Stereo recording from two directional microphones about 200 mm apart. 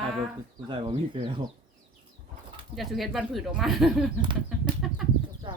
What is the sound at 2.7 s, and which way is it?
A woman's voice, centre (ahead or behind).